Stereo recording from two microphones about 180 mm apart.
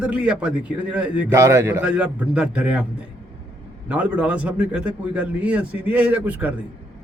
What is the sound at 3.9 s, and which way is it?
A man's voice, 5° right (ahead or behind).